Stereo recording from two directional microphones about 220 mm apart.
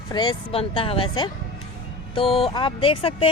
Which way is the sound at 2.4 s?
25° left (ahead or behind).